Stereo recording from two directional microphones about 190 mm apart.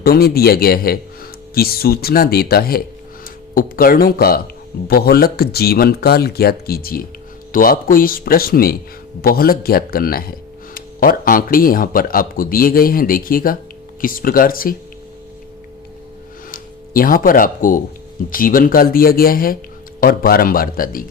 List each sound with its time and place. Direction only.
0.0 s speech: 55° left (ahead or behind)
16.5 s speech: 50° left (ahead or behind)